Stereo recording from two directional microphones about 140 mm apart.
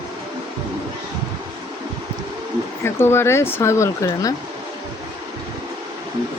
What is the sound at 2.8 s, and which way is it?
Speech, 15° left (ahead or behind).